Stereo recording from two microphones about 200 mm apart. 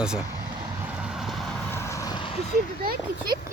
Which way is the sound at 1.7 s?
15° left (ahead or behind).